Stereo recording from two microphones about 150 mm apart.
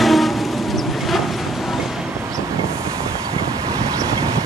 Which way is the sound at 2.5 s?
20° right (ahead or behind).